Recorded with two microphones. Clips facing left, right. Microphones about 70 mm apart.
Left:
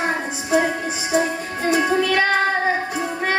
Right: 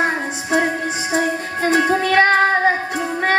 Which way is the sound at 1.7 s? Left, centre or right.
Right.